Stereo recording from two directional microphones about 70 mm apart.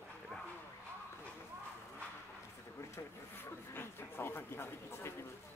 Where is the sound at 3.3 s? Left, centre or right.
Left.